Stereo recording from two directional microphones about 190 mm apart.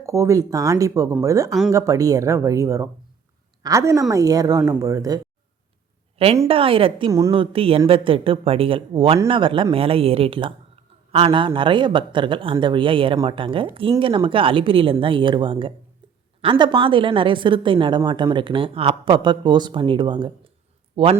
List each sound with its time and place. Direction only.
0.0 s speech: 15° right (ahead or behind)
6.2 s a woman's voice: 30° right (ahead or behind)